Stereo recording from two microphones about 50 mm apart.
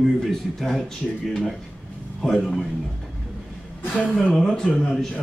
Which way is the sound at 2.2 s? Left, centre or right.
Centre.